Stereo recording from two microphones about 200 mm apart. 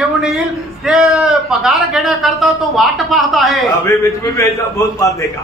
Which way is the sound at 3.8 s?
15° left (ahead or behind).